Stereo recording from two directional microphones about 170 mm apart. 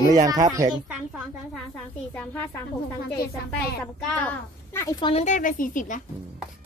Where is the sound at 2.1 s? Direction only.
10° left (ahead or behind).